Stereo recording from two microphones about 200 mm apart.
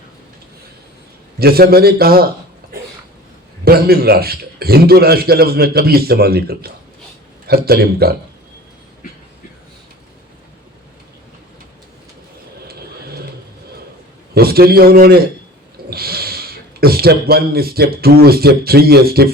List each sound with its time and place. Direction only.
1.4 s a man's voice: 50° right (ahead or behind)
3.6 s a man's voice: 50° right (ahead or behind)
14.3 s a man's voice: 50° right (ahead or behind)